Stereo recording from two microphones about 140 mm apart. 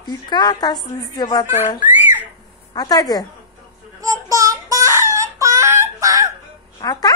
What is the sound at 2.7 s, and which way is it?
Speech, 25° left (ahead or behind).